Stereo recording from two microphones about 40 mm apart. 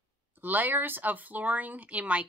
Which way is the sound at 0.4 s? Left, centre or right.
Right.